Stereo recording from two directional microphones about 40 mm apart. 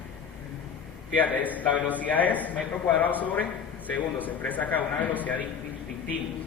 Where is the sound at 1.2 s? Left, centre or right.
Left.